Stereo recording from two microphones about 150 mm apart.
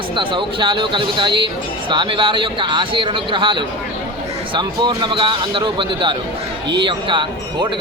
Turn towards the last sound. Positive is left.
turn(degrees=-30)  # may be behind; listen again after turning